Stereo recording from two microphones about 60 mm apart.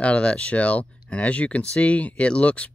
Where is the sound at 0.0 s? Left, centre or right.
Centre.